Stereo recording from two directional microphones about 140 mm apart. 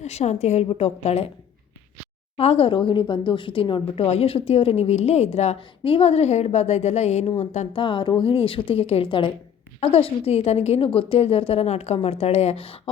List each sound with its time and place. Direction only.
0.0 s a woman's voice: 50° left (ahead or behind)
2.4 s a woman's voice: 45° left (ahead or behind)
7.8 s a woman's voice: 35° left (ahead or behind)